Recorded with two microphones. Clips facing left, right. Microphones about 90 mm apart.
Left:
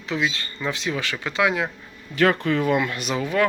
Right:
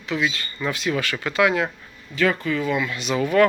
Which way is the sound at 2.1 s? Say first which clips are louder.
Left 2 dB; 60° left (ahead or behind).